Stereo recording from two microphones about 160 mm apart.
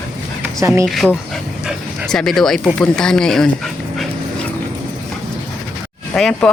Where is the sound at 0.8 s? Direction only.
Centre (ahead or behind).